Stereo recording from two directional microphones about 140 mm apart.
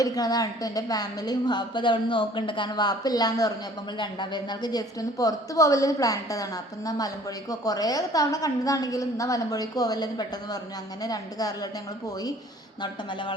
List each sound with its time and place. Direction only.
0.0 s a woman's voice: 30° left (ahead or behind)